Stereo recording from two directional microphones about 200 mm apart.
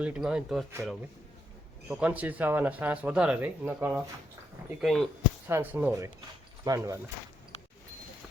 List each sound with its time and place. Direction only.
0.0 s speech: 5° right (ahead or behind)
1.9 s speech: 5° right (ahead or behind)
4.8 s speech: centre (ahead or behind)
5.5 s speech: 10° right (ahead or behind)